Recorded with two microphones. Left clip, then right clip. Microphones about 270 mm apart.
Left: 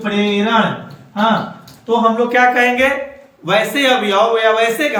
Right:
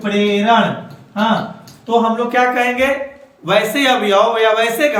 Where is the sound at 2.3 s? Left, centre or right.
Centre.